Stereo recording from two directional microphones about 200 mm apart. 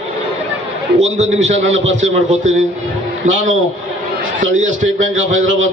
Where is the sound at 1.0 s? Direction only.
35° right (ahead or behind).